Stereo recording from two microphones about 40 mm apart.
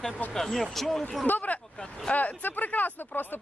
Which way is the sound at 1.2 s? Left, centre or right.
Left.